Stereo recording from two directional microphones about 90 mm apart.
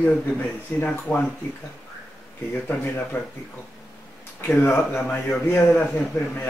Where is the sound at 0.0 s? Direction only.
15° left (ahead or behind).